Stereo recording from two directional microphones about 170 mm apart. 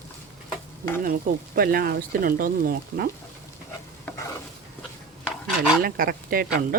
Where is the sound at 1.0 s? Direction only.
60° right (ahead or behind).